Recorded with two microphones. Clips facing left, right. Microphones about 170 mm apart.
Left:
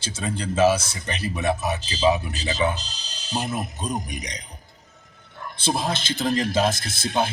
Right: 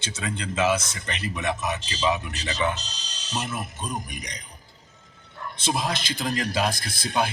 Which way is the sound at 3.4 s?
40° left (ahead or behind).